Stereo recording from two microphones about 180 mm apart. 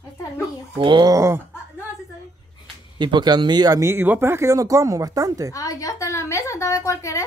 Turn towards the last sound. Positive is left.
turn(degrees=15)  # may be behind; listen again after turning